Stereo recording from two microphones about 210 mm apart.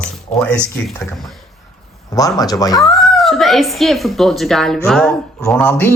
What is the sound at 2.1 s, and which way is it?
Speech, 15° left (ahead or behind).